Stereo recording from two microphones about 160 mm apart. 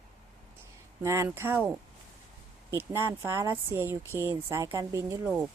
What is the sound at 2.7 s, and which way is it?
Speech, 15° right (ahead or behind).